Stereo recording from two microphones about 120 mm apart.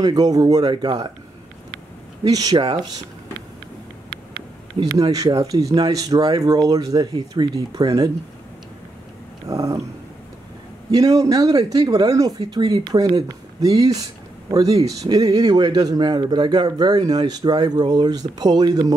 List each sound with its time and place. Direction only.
0.0 s a man's voice: 30° right (ahead or behind)
2.2 s a man's voice: 30° right (ahead or behind)
4.9 s a man's voice: 30° right (ahead or behind)
9.5 s a sound: 30° right (ahead or behind)
10.9 s a man's voice: 30° right (ahead or behind)